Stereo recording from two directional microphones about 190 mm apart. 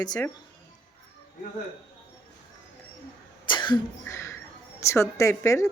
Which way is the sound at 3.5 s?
25° left (ahead or behind).